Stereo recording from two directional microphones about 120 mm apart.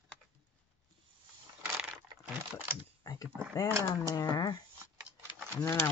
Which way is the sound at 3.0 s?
30° left (ahead or behind).